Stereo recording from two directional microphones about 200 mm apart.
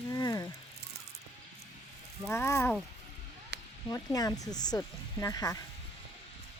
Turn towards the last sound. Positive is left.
turn(degrees=20)  # may be behind; listen again after turning